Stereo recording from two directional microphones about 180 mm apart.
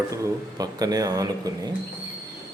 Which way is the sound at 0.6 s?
20° right (ahead or behind).